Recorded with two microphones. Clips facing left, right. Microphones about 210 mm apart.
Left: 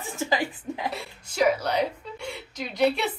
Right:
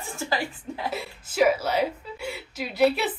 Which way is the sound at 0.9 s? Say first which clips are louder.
Right 4 dB; 5° right (ahead or behind).